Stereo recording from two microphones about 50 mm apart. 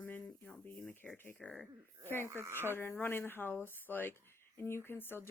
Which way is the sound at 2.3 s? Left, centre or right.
Right.